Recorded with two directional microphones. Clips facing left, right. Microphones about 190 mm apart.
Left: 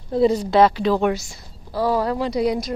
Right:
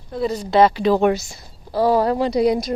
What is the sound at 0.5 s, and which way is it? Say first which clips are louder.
Speech: right 4 dB; centre (ahead or behind).